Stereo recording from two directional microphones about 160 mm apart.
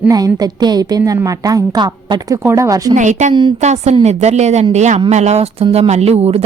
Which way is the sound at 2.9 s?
50° right (ahead or behind).